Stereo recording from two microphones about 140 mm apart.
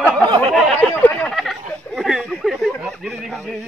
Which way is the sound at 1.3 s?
Centre (ahead or behind).